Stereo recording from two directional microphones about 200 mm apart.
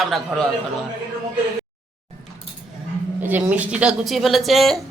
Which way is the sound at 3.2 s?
10° right (ahead or behind).